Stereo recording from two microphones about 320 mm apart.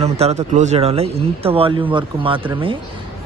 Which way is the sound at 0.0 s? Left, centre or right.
Centre.